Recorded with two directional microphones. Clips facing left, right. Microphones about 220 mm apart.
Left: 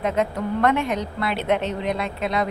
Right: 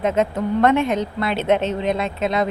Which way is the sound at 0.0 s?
25° right (ahead or behind).